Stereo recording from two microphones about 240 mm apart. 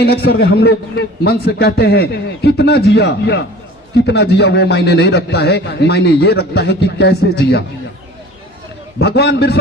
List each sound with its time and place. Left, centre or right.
0.0 s a man's voice: left
9.0 s a man's voice: left